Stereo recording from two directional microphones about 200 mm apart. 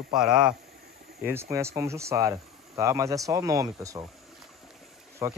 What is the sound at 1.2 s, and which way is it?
Speech, 15° right (ahead or behind).